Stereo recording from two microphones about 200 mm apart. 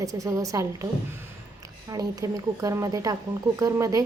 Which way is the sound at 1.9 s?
15° right (ahead or behind).